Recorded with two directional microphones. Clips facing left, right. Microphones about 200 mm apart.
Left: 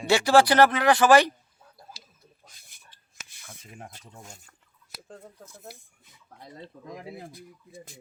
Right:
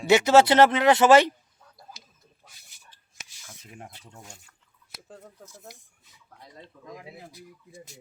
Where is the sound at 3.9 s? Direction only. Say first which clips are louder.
Even; 45° left (ahead or behind).